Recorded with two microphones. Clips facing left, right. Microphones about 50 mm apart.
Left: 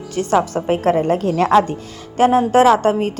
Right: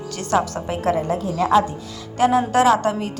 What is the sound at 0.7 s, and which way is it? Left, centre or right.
Speech, left.